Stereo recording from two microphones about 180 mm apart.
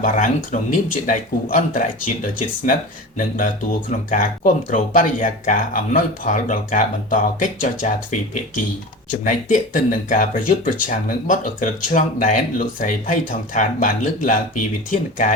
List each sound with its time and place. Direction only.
0.0 s speech: 45° left (ahead or behind)
3.2 s speech: 45° left (ahead or behind)